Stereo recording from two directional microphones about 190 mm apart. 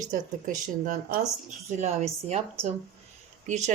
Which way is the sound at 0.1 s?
45° right (ahead or behind).